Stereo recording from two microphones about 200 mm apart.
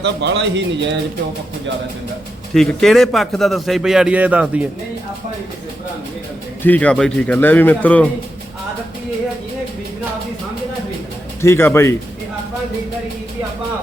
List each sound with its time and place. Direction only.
0.0 s speech: 60° right (ahead or behind)
2.5 s a man's voice: centre (ahead or behind)
6.6 s a man's voice: 10° left (ahead or behind)
11.4 s a man's voice: 10° left (ahead or behind)